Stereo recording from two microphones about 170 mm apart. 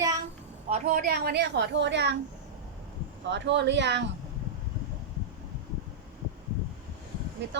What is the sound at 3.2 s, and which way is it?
Speech, 90° right.